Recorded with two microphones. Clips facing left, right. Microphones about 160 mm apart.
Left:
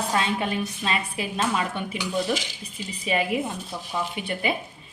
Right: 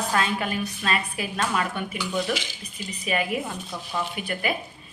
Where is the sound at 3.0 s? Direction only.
25° left (ahead or behind).